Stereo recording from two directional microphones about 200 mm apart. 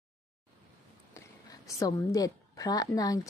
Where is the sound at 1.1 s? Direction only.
15° left (ahead or behind).